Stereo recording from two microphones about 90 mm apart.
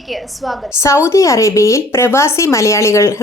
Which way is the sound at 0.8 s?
30° left (ahead or behind).